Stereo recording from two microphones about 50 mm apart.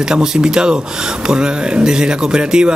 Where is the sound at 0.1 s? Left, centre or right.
Centre.